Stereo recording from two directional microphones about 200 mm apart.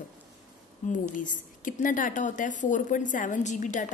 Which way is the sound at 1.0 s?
40° left (ahead or behind).